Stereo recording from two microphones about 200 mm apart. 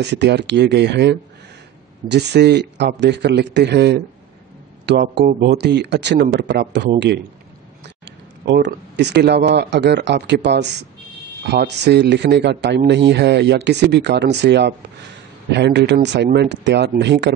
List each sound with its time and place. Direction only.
0.0 s speech: 60° right (ahead or behind)
8.5 s speech: 60° right (ahead or behind)